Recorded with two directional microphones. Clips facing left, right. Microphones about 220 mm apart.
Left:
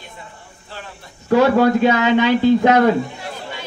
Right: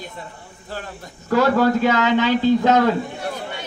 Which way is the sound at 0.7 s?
45° right (ahead or behind).